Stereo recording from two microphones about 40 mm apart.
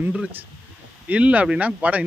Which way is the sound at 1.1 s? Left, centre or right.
Right.